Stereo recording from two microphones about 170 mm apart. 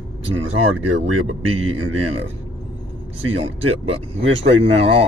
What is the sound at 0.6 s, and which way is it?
Speech, 40° right (ahead or behind).